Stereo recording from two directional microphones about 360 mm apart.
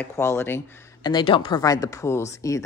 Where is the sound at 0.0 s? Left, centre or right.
Centre.